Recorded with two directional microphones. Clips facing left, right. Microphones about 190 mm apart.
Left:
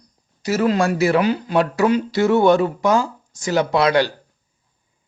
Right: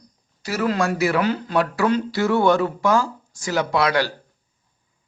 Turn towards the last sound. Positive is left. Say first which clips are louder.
# left 4 dB
turn(degrees=25)  # may be behind; listen again after turning